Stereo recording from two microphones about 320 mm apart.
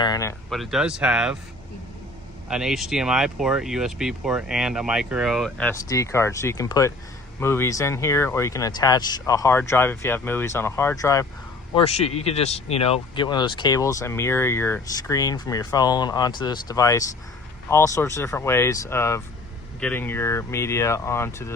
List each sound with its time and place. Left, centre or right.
0.0 s speech: centre
2.5 s speech: centre